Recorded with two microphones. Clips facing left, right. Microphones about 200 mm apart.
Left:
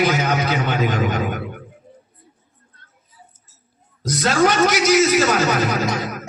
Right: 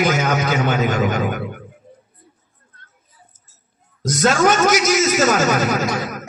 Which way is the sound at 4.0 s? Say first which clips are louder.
Right 1 dB; 45° right (ahead or behind).